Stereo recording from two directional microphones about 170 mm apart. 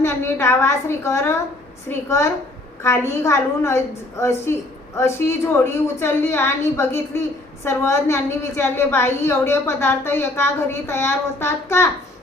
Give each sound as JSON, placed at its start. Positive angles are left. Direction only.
{"t": 0.0, "sound": "a woman's voice", "side_deg": 15}